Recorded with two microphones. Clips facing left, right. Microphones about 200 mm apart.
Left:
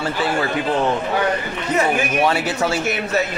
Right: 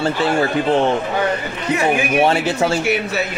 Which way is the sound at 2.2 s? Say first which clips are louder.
Right 3 dB; 25° right (ahead or behind).